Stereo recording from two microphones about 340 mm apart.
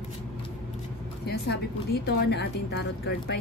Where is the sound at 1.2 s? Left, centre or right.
Left.